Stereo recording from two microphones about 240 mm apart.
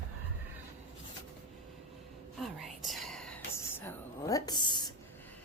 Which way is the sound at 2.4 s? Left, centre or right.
Centre.